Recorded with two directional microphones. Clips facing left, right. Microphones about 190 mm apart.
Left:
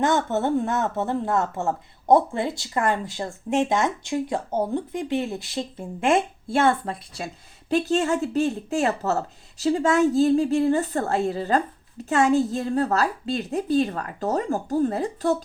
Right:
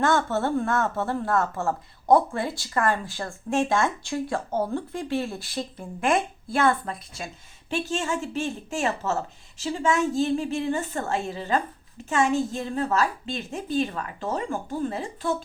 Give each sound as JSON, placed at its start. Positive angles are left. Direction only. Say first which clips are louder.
{"t": 0.0, "sound": "a woman's voice", "louder": "left 1 dB", "side_deg": 20}